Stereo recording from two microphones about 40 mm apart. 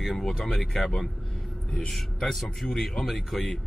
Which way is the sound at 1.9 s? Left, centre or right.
Centre.